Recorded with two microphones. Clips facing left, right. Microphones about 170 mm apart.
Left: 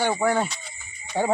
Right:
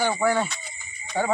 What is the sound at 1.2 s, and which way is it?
Speech, 20° left (ahead or behind).